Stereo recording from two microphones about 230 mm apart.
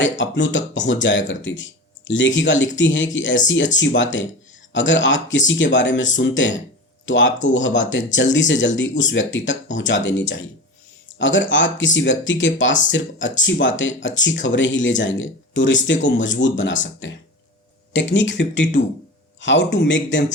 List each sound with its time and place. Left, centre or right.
0.0 s speech: left